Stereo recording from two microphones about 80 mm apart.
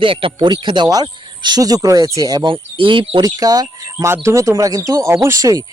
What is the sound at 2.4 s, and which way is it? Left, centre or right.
Speech, right.